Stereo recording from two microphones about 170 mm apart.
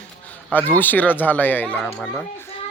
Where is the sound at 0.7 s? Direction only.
10° left (ahead or behind).